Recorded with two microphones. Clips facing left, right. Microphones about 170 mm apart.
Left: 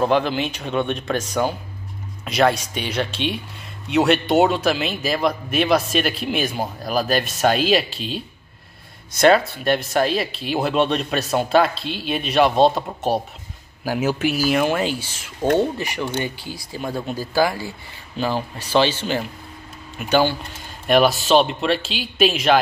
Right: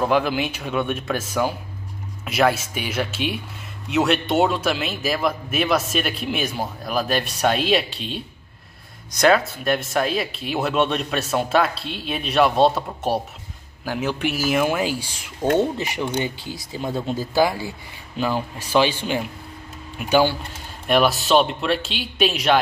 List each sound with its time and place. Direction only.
0.1 s a man's voice: 10° right (ahead or behind)
9.5 s a man's voice: centre (ahead or behind); by 17.6 s 20° right (ahead or behind)
18.1 s a man's voice: 10° right (ahead or behind)